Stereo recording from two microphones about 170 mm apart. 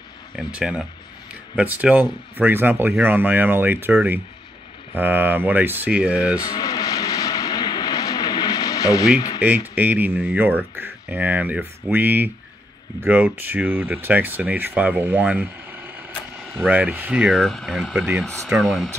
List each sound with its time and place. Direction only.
0.4 s speech: 5° right (ahead or behind)
6.4 s vehicle: 25° left (ahead or behind)
9.4 s speech: 10° right (ahead or behind)